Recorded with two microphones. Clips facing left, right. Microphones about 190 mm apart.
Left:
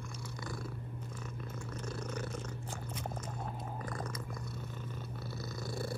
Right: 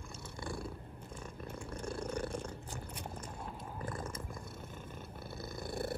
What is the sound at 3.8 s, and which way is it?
Cat, 25° right (ahead or behind).